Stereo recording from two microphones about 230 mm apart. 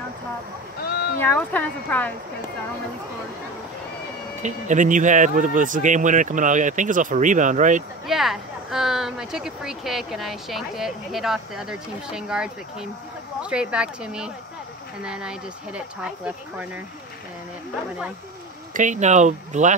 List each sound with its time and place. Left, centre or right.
1.2 s speech: centre
4.4 s speech: right
8.1 s speech: centre
18.7 s speech: right